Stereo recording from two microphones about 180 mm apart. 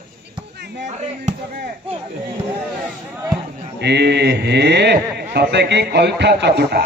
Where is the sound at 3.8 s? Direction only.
70° right (ahead or behind).